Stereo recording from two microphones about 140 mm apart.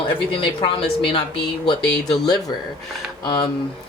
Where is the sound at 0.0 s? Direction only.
40° left (ahead or behind).